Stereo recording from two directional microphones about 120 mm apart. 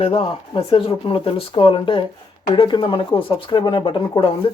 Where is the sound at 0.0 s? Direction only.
50° left (ahead or behind).